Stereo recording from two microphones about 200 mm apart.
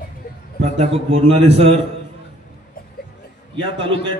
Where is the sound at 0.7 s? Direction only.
30° right (ahead or behind).